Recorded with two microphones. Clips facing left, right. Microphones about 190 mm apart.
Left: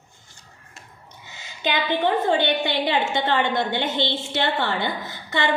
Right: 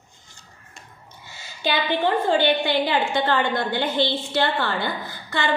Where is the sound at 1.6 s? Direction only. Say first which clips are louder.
Even; 20° left (ahead or behind).